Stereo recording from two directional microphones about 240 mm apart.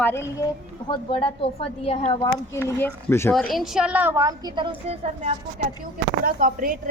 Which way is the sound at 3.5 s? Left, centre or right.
Centre.